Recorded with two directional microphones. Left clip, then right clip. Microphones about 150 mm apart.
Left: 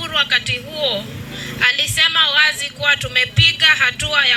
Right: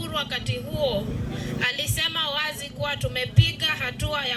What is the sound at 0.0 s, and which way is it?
Speech, 30° right (ahead or behind).